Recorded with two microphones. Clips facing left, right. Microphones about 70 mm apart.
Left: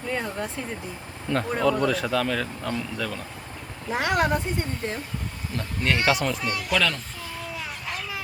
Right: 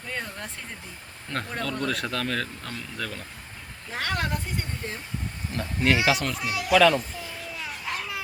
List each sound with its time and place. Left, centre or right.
0.1 s speech: centre
3.9 s speech: centre
5.5 s speech: centre